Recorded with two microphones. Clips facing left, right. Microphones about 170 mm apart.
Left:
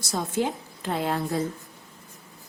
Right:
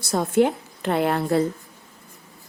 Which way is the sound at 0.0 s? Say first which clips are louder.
Right 7 dB; 60° right (ahead or behind).